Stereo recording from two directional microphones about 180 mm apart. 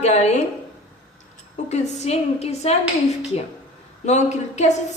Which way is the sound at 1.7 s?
40° left (ahead or behind).